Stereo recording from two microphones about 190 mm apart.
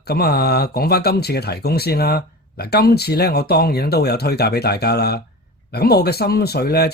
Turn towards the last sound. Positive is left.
turn(degrees=55)  # may be behind; listen again after turning